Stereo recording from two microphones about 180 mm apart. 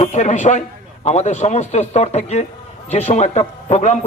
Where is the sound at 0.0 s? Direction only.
40° left (ahead or behind).